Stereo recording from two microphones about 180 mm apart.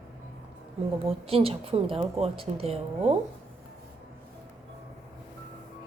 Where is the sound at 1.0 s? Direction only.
30° right (ahead or behind).